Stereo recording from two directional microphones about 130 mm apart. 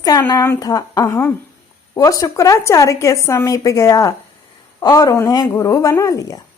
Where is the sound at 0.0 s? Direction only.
30° left (ahead or behind).